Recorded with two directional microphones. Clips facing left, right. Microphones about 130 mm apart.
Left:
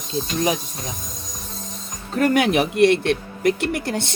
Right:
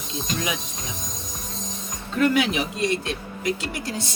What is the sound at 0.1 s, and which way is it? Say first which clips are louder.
Speech: left 6 dB; 35° left (ahead or behind).